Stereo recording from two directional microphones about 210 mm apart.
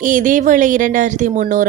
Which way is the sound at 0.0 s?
40° right (ahead or behind).